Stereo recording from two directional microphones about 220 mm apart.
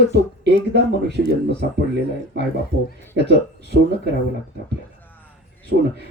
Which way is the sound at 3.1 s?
50° right (ahead or behind).